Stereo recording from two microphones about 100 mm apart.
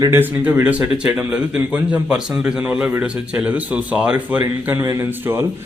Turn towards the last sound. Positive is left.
turn(degrees=-25)  # may be behind; listen again after turning